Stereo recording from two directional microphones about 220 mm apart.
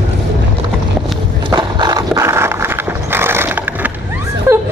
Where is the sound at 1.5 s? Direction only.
20° right (ahead or behind).